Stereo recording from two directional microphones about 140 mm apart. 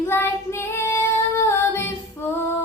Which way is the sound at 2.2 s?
15° left (ahead or behind).